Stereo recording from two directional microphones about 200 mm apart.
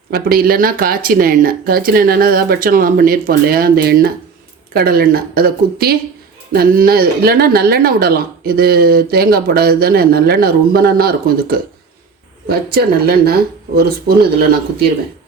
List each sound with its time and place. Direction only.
0.1 s speech: 45° right (ahead or behind)